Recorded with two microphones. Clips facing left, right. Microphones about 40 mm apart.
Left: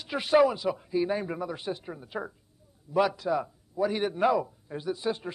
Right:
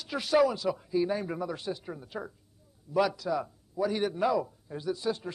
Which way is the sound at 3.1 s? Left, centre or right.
Left.